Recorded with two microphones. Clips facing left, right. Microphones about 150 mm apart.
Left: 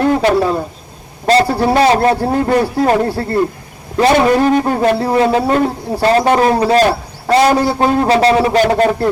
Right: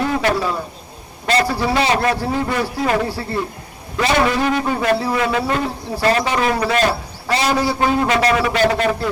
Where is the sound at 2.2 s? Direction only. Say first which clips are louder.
Left 7 dB; 50° left (ahead or behind); by 6.8 s 35° left (ahead or behind).